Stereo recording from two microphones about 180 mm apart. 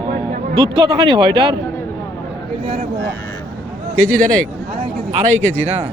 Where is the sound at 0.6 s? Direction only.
30° right (ahead or behind).